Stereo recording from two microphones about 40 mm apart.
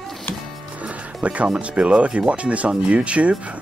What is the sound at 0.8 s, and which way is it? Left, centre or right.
Speech, right.